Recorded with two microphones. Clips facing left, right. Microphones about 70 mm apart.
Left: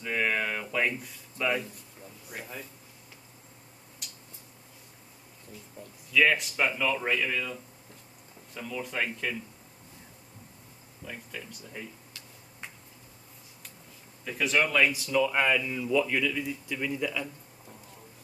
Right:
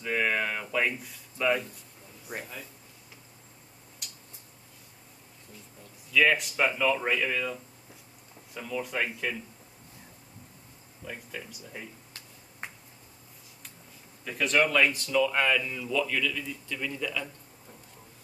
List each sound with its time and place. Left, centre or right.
0.0 s a sound: centre
2.3 s speech: right
4.0 s a sound: centre
6.1 s speech: centre
11.1 s speech: centre
14.2 s speech: centre